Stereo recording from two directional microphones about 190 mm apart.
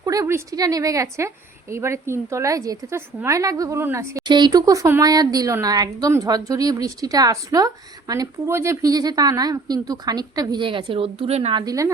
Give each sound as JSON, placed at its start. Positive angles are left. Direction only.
{"t": 0.0, "sound": "a woman's voice", "side_deg": -20}
{"t": 11.6, "sound": "a woman's voice", "side_deg": -20}